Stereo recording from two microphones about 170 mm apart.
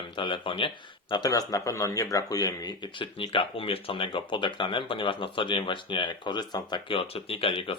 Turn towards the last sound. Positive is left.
turn(degrees=35)  # may be behind; listen again after turning